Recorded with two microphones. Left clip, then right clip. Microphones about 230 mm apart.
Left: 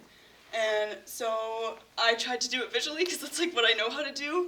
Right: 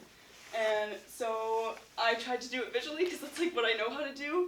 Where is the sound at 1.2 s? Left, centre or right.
Left.